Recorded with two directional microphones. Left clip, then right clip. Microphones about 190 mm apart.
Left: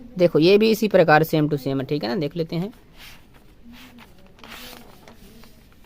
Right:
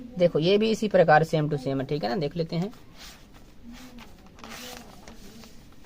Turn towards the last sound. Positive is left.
turn(degrees=15)  # may be behind; listen again after turning